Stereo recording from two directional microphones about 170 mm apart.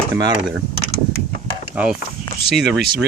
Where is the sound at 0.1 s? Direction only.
20° right (ahead or behind).